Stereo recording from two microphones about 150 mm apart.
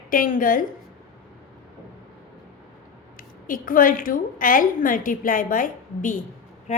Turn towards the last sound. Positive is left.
turn(degrees=65)  # may be behind; listen again after turning